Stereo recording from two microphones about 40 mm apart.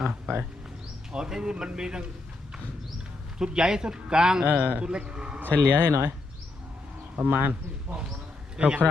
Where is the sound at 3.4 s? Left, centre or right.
Centre.